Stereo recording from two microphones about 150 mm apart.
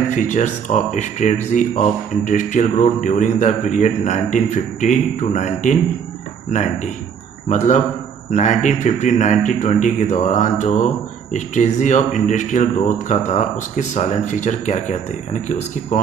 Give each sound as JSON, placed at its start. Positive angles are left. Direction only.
{"t": 0.1, "sound": "a man's voice", "side_deg": 55}
{"t": 7.4, "sound": "a man's voice", "side_deg": 50}